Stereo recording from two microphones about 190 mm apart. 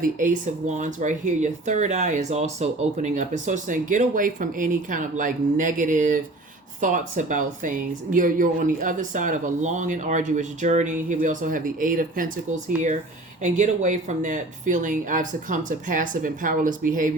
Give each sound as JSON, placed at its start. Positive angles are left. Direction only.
{"t": 0.0, "sound": "speech", "side_deg": -45}
{"t": 13.4, "sound": "speech", "side_deg": -40}